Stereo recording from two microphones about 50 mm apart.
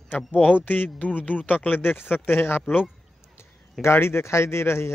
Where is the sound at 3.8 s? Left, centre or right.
Left.